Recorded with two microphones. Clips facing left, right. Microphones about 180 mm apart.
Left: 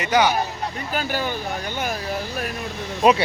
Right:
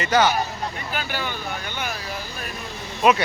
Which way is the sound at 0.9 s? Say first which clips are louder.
Left 6 dB; 40° left (ahead or behind).